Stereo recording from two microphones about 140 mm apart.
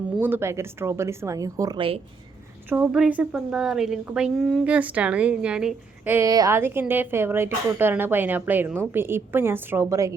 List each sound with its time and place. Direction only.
0.2 s speech: 15° right (ahead or behind)
2.6 s speech: 10° right (ahead or behind)
6.1 s speech: 25° right (ahead or behind)
6.6 s speech: 15° right (ahead or behind)